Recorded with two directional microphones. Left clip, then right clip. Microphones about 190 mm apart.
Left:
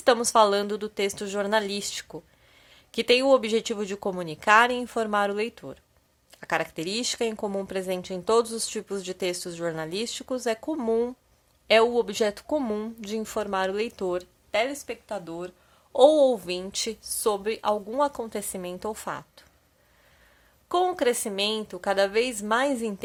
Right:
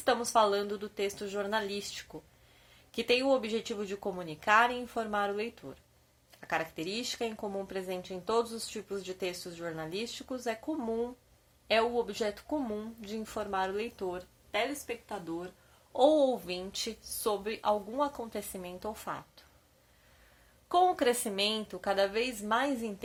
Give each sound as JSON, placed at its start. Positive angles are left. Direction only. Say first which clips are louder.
{"t": 0.0, "sound": "speech", "louder": "left 7 dB", "side_deg": 45}
{"t": 15.9, "sound": "a woman's voice", "louder": "left 8 dB", "side_deg": 45}
{"t": 20.7, "sound": "a woman's voice", "louder": "left 3 dB", "side_deg": 30}